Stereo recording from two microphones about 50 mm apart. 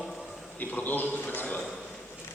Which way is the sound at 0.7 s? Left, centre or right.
Left.